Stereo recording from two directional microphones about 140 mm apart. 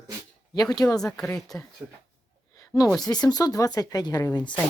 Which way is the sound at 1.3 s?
Centre (ahead or behind).